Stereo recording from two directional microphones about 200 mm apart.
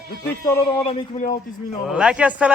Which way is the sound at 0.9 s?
25° left (ahead or behind).